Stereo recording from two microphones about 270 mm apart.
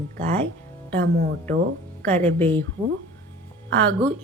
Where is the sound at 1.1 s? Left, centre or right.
Right.